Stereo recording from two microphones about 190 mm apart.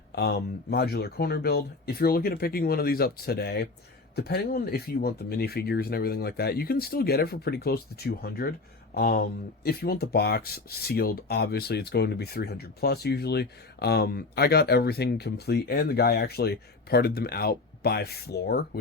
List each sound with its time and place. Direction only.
0.1 s speech: 60° left (ahead or behind)